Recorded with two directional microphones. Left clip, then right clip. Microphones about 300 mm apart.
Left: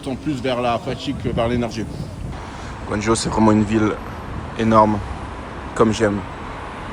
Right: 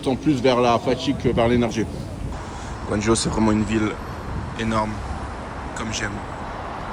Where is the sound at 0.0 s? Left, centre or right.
Centre.